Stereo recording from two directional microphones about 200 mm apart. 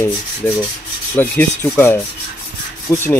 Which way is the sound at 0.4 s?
10° left (ahead or behind).